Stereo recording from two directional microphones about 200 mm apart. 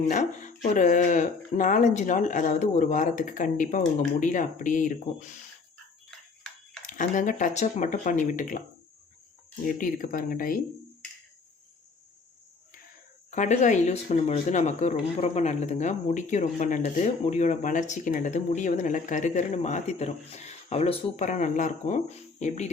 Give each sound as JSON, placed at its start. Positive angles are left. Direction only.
{"t": 0.1, "sound": "speech", "side_deg": 40}
{"t": 6.8, "sound": "speech", "side_deg": 40}
{"t": 9.6, "sound": "speech", "side_deg": 45}
{"t": 13.3, "sound": "speech", "side_deg": 35}